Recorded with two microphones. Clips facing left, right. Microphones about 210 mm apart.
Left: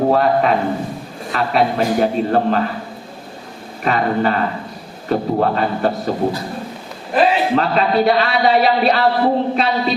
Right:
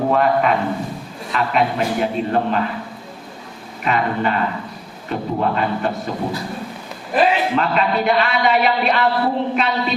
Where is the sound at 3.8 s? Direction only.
40° left (ahead or behind).